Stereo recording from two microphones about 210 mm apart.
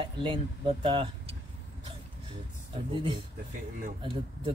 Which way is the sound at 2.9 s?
25° right (ahead or behind).